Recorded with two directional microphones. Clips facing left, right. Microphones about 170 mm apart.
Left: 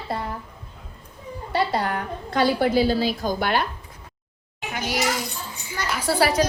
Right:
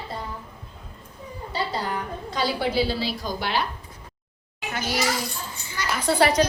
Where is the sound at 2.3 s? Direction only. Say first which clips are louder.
Left 6 dB; 55° left (ahead or behind).